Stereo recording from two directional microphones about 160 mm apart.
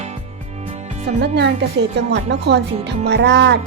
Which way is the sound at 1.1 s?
90° right.